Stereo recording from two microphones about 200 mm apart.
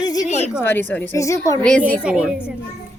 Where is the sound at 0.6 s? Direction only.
10° left (ahead or behind).